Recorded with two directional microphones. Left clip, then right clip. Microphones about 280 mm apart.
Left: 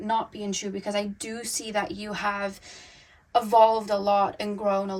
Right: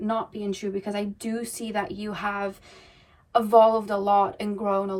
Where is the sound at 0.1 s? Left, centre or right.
Left.